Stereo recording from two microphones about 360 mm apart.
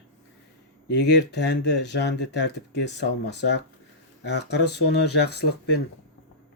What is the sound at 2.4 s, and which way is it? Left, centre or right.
Speech, left.